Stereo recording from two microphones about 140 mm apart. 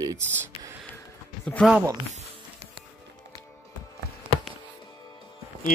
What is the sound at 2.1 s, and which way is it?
Music, 45° right (ahead or behind).